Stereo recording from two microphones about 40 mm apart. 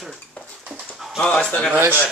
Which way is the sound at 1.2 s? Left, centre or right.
Left.